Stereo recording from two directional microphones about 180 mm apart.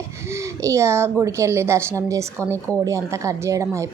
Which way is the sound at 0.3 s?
15° right (ahead or behind).